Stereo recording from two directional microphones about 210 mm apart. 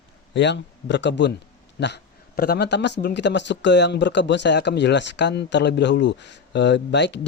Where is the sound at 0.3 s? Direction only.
55° left (ahead or behind).